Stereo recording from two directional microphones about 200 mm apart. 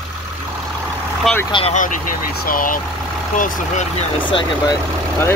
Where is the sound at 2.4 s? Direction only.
45° left (ahead or behind).